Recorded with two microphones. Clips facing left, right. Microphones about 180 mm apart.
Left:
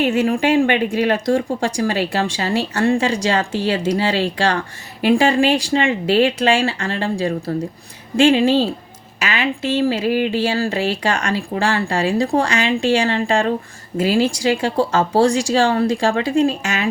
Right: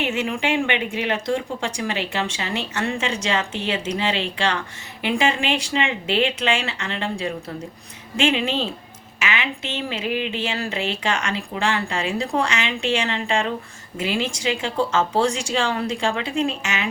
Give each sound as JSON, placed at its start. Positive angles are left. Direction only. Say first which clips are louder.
{"t": 0.0, "sound": "a woman's voice", "louder": "left 7 dB", "side_deg": 40}